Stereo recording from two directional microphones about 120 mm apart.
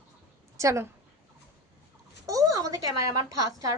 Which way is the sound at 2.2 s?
30° right (ahead or behind).